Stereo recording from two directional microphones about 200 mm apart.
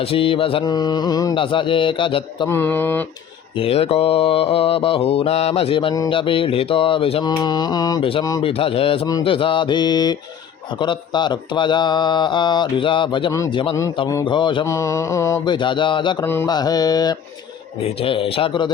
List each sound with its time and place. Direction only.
0.0 s mantra: 25° left (ahead or behind)
2.5 s speech: 10° left (ahead or behind)
3.6 s mantra: 30° left (ahead or behind)
16.2 s mantra: 10° left (ahead or behind)